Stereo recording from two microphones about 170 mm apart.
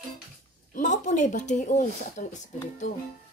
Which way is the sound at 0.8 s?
45° left (ahead or behind).